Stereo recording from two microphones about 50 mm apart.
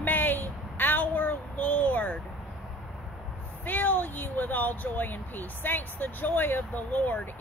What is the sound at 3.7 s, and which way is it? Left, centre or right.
Speech, left.